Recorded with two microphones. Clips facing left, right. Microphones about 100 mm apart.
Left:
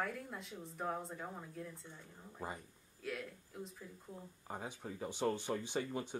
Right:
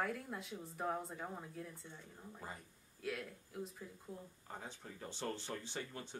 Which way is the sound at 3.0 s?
Centre (ahead or behind).